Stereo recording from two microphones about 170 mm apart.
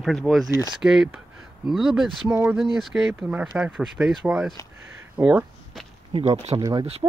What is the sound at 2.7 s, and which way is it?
Speech, centre (ahead or behind).